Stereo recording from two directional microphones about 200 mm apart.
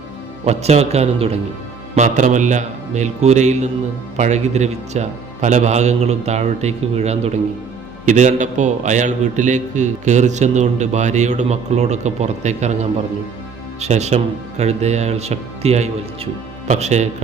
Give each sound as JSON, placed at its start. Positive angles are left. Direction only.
{"t": 0.4, "sound": "a man's voice", "side_deg": -30}